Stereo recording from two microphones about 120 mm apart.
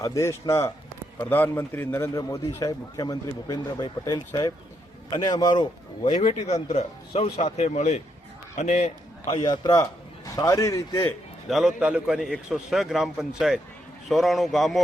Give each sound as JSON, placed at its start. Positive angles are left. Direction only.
{"t": 0.0, "sound": "a man's voice", "side_deg": 25}
{"t": 6.1, "sound": "a man's voice", "side_deg": 65}
{"t": 9.3, "sound": "a man's voice", "side_deg": 35}
{"t": 11.4, "sound": "a man's voice", "side_deg": -5}